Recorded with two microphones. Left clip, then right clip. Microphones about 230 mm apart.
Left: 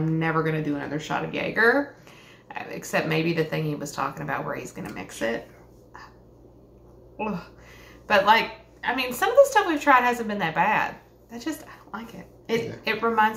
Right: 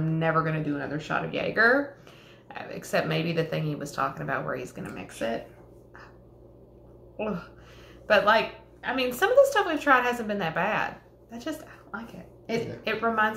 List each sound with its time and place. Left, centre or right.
0.2 s speech: centre
7.2 s a woman's voice: centre